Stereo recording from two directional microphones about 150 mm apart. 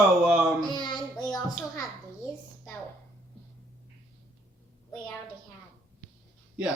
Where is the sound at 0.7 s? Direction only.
30° left (ahead or behind).